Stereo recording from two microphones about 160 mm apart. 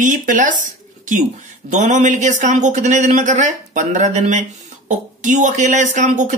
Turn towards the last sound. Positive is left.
turn(degrees=-50)  # may be behind; listen again after turning